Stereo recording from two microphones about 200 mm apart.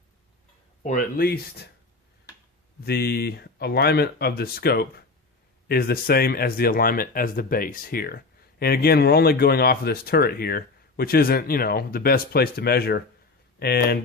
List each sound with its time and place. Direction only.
0.8 s speech: 40° left (ahead or behind)
2.8 s speech: 50° left (ahead or behind)